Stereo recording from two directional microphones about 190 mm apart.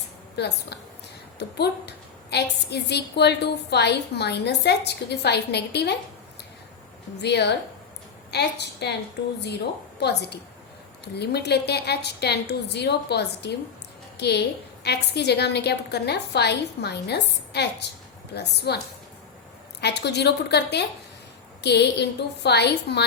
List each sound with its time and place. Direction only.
0.3 s a woman's voice: 60° left (ahead or behind)
7.2 s a woman's voice: 60° left (ahead or behind)
10.0 s a woman's voice: 60° left (ahead or behind)
19.8 s a woman's voice: 60° left (ahead or behind)